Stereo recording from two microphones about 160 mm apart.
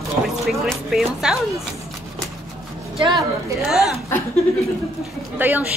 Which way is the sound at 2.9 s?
30° right (ahead or behind).